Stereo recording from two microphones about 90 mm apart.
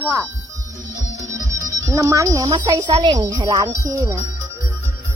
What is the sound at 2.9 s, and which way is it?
Speech, 65° right (ahead or behind).